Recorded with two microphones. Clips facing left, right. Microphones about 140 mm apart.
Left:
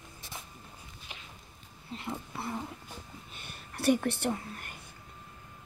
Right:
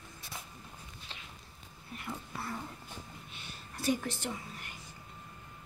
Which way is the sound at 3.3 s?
50° left (ahead or behind).